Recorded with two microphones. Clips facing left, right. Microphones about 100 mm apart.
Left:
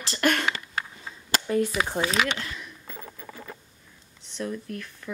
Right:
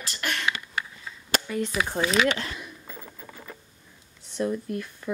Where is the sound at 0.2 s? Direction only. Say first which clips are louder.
Left 5 dB; 45° left (ahead or behind).